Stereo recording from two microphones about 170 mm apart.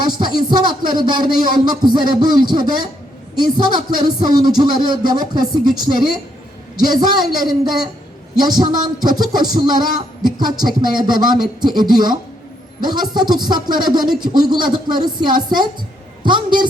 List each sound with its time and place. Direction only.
0.2 s a man's voice: 25° right (ahead or behind)